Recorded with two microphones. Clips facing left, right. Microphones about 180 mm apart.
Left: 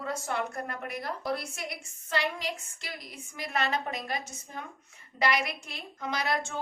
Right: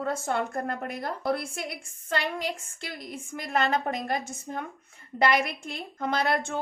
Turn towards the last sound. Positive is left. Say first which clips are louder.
# right 4 dB
turn(degrees=-55)  # may be behind; listen again after turning